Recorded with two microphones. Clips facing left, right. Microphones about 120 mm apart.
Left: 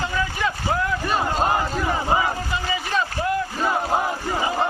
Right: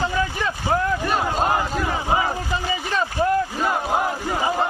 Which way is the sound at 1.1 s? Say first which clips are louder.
Even; centre (ahead or behind).